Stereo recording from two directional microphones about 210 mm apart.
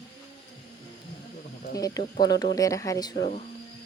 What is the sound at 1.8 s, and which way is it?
Speech, 15° left (ahead or behind).